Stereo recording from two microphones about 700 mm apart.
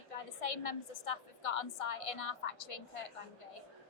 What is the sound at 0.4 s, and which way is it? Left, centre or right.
A woman's voice, left.